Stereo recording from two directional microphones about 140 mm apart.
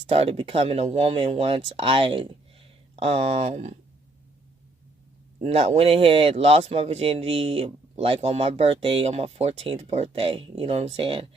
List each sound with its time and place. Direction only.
0.1 s a man's voice: 45° right (ahead or behind)
5.4 s a man's voice: 45° right (ahead or behind)